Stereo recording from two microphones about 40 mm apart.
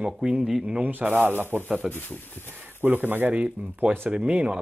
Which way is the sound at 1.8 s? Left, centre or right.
Centre.